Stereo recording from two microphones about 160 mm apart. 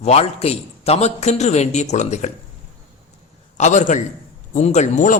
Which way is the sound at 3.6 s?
50° left (ahead or behind).